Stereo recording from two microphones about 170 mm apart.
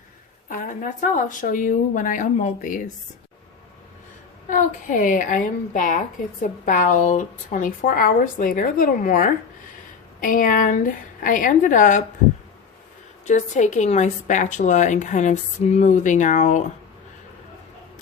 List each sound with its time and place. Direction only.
0.4 s a woman's voice: 50° left (ahead or behind)
4.4 s a woman's voice: 50° left (ahead or behind)
13.2 s a woman's voice: 45° left (ahead or behind)